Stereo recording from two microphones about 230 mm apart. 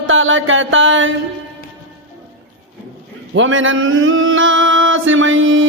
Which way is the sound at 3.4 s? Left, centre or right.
Right.